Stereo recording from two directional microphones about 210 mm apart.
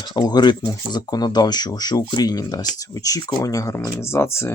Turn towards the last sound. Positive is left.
turn(degrees=10)  # may be behind; listen again after turning